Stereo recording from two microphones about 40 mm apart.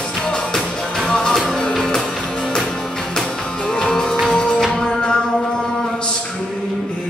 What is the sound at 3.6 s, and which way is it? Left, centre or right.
Music, centre.